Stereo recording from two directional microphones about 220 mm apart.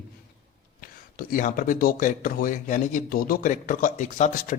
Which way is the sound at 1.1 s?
40° left (ahead or behind).